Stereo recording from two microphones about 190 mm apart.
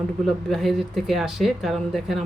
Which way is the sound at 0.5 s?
Centre (ahead or behind).